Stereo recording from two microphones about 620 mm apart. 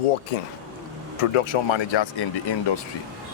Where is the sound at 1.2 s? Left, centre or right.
Left.